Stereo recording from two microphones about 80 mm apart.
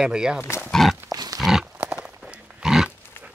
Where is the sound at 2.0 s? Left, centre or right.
Centre.